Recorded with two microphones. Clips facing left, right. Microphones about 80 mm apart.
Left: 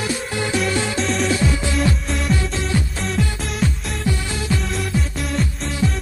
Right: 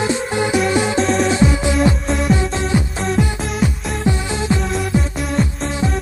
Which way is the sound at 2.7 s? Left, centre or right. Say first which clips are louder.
Right 4 dB; centre.